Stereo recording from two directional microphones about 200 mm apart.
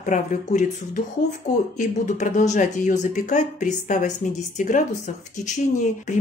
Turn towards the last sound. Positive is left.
turn(degrees=35)  # may be behind; listen again after turning